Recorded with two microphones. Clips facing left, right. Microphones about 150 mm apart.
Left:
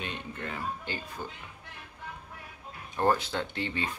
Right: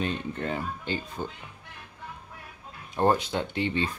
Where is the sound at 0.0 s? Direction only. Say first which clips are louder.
Right 7 dB; 35° right (ahead or behind).